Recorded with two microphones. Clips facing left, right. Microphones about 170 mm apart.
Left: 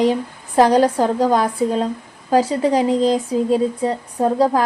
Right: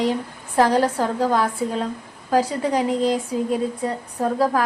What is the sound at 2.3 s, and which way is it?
A woman's voice, 30° left (ahead or behind).